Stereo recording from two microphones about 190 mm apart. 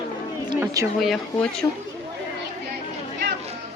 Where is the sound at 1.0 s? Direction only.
Centre (ahead or behind).